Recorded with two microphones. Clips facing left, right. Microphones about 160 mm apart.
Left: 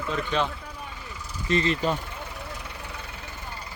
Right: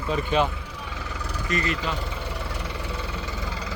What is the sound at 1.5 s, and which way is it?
Speech, 30° left (ahead or behind).